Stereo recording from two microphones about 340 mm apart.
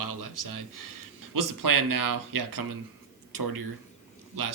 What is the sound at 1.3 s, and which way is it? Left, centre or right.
Speech, right.